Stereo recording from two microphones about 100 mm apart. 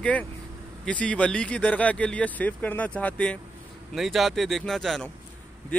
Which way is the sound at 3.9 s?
Centre (ahead or behind).